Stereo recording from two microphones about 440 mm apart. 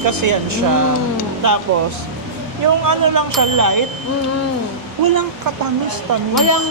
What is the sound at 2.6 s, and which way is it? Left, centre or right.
Speech, right.